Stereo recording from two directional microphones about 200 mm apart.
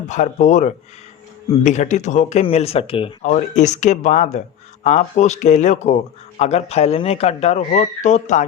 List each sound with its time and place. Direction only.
0.1 s speech: 35° left (ahead or behind)